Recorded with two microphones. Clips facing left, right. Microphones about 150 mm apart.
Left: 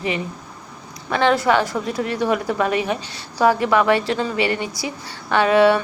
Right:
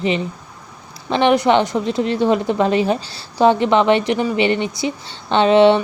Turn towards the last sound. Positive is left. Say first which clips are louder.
# right 3 dB
turn(degrees=-25)  # may be behind; listen again after turning